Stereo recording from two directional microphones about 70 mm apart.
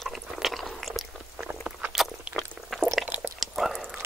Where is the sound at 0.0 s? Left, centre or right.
Centre.